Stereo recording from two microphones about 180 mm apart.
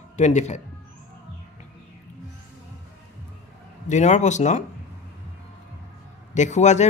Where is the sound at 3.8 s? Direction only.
40° left (ahead or behind).